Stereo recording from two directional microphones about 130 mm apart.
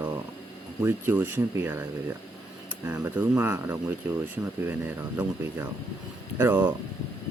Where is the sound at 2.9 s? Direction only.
20° right (ahead or behind).